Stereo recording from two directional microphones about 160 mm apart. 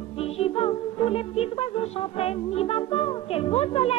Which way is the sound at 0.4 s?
35° left (ahead or behind).